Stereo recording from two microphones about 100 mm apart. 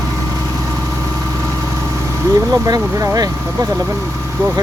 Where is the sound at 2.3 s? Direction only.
40° right (ahead or behind).